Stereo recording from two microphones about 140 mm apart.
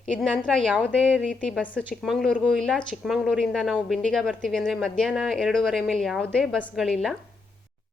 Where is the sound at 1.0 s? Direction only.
5° right (ahead or behind).